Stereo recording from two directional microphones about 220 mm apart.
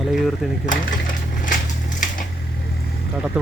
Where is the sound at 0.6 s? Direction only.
35° left (ahead or behind).